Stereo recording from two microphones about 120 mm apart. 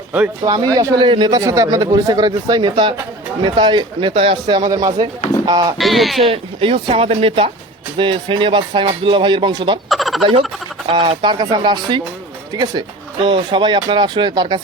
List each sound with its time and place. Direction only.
0.4 s speech: 30° right (ahead or behind)
1.4 s speech: 25° right (ahead or behind)
4.1 s speech: 55° right (ahead or behind)
4.4 s speech: 40° right (ahead or behind)
5.7 s speech: centre (ahead or behind)
6.2 s speech: 45° right (ahead or behind)
9.9 s fowl: centre (ahead or behind)
10.8 s speech: 45° right (ahead or behind)